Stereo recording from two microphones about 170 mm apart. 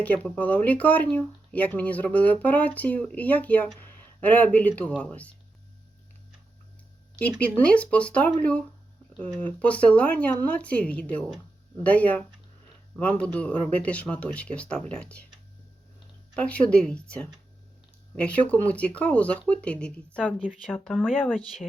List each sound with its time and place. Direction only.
0.0 s speech: 10° left (ahead or behind)
7.2 s speech: 10° left (ahead or behind)
16.3 s speech: 5° left (ahead or behind)
20.2 s speech: 5° right (ahead or behind)